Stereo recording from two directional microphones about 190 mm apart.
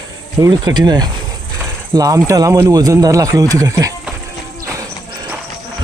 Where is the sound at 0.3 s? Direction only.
20° right (ahead or behind).